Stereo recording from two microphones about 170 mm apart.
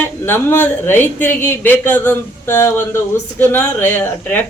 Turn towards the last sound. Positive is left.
turn(degrees=15)  # may be behind; listen again after turning